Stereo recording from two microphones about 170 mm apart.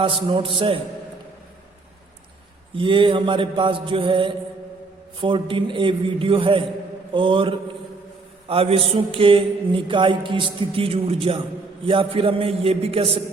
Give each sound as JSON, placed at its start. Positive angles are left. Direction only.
{"t": 0.0, "sound": "mantra", "side_deg": -30}
{"t": 2.7, "sound": "mantra", "side_deg": -30}